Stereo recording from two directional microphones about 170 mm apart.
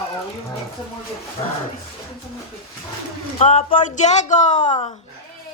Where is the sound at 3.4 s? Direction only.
40° left (ahead or behind).